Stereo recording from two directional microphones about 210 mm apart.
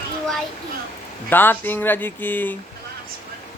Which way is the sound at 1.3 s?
10° left (ahead or behind).